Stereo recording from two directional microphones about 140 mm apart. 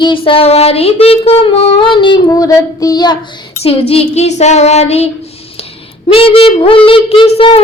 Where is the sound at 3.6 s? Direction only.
45° left (ahead or behind).